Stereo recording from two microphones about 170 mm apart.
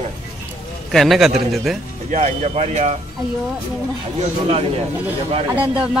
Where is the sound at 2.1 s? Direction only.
40° right (ahead or behind).